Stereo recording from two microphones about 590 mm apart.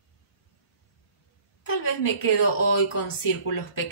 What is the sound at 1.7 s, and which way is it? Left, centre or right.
Speech, left.